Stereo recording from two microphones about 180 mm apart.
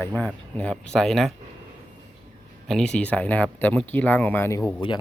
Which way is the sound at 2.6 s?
5° left (ahead or behind).